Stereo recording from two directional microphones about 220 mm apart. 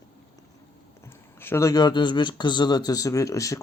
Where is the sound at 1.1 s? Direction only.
10° left (ahead or behind).